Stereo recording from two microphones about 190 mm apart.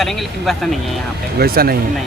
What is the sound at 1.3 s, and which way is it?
Speech, 55° right (ahead or behind).